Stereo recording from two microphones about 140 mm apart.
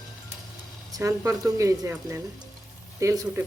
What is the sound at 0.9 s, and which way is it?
Speech, 20° right (ahead or behind).